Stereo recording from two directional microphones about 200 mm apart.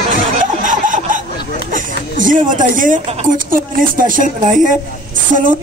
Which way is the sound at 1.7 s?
40° right (ahead or behind).